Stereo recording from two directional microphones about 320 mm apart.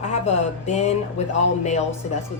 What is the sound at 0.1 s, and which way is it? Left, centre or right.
Speech, left.